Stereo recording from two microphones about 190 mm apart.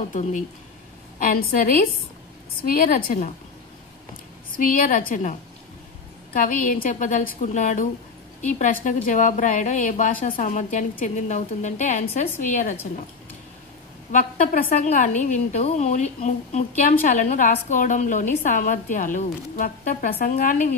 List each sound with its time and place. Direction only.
0.1 s a woman's voice: 40° left (ahead or behind)
4.6 s a woman's voice: 45° left (ahead or behind)
6.3 s a woman's voice: 45° left (ahead or behind)
14.1 s a woman's voice: 40° left (ahead or behind)